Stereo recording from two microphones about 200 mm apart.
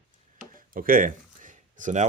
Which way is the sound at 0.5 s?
45° right (ahead or behind).